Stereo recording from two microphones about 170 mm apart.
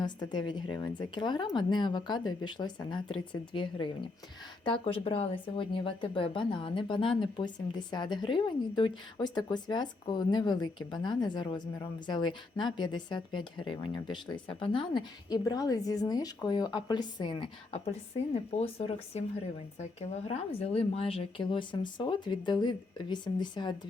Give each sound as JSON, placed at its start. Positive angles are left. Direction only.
{"t": 0.0, "sound": "a woman's voice", "side_deg": 25}